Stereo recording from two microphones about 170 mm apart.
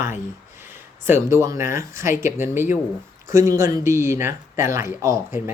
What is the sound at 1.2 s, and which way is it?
Speech, 15° right (ahead or behind).